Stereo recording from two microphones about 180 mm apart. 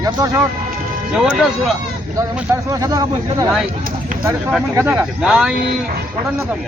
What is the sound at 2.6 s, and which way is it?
Speech, 20° right (ahead or behind).